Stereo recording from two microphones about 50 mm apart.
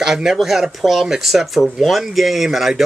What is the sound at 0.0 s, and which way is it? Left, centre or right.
Speech, centre.